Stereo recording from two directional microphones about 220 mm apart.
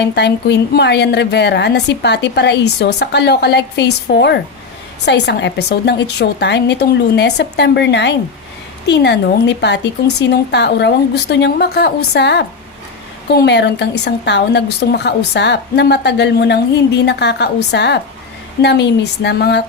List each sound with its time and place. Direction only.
0.1 s a woman's voice: 50° left (ahead or behind)